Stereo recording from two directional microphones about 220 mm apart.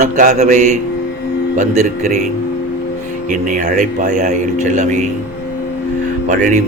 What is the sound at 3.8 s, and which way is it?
A man's voice, 35° right (ahead or behind).